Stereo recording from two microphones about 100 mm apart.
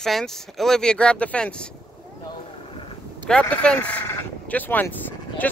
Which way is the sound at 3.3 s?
10° left (ahead or behind).